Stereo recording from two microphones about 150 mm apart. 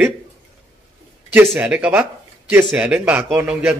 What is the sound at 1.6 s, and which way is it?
A man's voice, 10° right (ahead or behind).